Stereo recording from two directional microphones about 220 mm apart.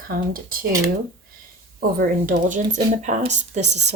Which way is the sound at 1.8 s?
45° right (ahead or behind).